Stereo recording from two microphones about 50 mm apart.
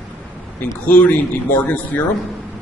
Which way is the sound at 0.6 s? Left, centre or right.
Left.